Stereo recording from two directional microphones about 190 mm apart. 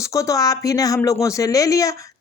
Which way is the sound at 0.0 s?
15° left (ahead or behind).